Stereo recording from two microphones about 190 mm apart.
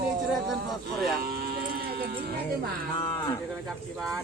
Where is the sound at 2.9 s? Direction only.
25° left (ahead or behind).